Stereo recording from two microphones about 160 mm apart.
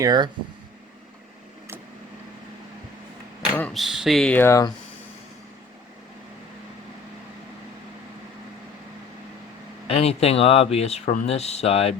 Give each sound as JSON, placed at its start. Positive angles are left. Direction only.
{"t": 0.0, "sound": "speech", "side_deg": -25}
{"t": 3.7, "sound": "speech", "side_deg": 0}
{"t": 9.8, "sound": "speech", "side_deg": 40}